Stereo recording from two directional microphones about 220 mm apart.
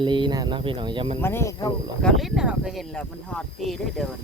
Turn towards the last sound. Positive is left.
turn(degrees=0)  # may be behind; listen again after turning